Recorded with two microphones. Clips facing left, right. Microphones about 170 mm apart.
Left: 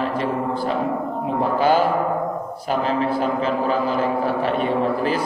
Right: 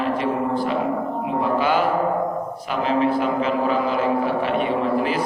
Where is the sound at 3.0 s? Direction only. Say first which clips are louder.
Right 1 dB; 35° left (ahead or behind).